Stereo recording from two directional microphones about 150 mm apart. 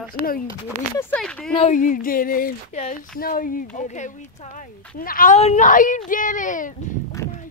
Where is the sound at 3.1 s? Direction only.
70° left (ahead or behind).